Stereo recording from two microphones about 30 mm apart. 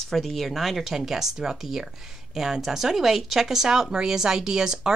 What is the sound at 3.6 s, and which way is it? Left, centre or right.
Speech, centre.